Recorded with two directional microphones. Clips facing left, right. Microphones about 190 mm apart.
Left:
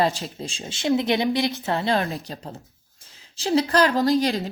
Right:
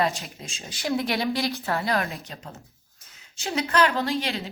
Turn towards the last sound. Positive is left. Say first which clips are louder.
# left 7 dB
turn(degrees=40)  # may be behind; listen again after turning